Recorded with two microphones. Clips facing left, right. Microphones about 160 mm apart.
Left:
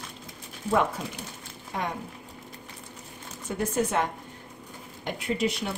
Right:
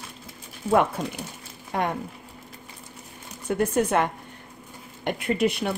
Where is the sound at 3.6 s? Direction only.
60° right (ahead or behind).